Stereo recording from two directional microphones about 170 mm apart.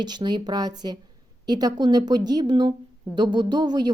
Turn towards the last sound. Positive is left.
turn(degrees=-25)  # may be behind; listen again after turning